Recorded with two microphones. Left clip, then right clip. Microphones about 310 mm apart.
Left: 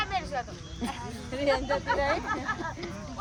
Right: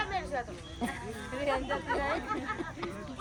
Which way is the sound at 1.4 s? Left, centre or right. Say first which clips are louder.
Left 5 dB; left.